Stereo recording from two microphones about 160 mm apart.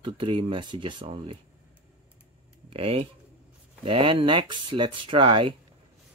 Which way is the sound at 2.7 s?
35° right (ahead or behind).